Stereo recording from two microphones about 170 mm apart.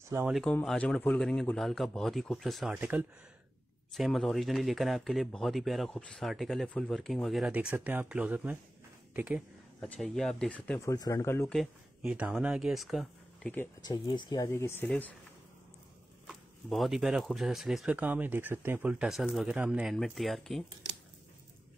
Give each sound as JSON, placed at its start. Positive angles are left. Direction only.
{"t": 0.3, "sound": "speech", "side_deg": 5}
{"t": 9.8, "sound": "speech", "side_deg": 5}
{"t": 11.5, "sound": "speech", "side_deg": 0}
{"t": 13.8, "sound": "speech", "side_deg": 25}
{"t": 16.3, "sound": "speech", "side_deg": 0}